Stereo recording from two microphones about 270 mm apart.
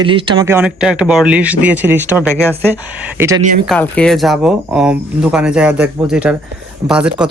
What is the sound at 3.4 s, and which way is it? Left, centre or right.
Speech, right.